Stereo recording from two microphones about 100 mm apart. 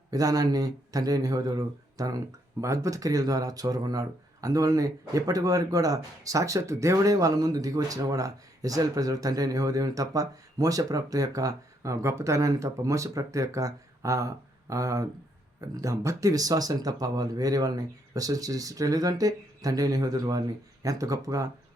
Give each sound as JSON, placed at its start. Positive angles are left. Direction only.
{"t": 0.1, "sound": "speech", "side_deg": -35}